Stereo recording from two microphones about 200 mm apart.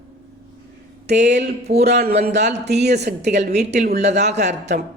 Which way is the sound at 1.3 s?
55° right (ahead or behind).